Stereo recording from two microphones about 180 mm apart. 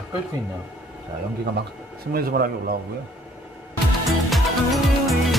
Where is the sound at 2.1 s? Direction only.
55° right (ahead or behind).